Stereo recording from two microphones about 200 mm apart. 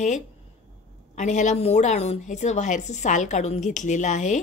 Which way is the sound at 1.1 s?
35° left (ahead or behind).